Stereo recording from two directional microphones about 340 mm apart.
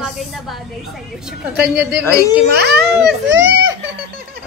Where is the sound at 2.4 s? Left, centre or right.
Right.